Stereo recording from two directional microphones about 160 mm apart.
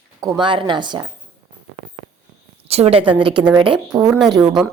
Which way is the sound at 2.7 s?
40° right (ahead or behind).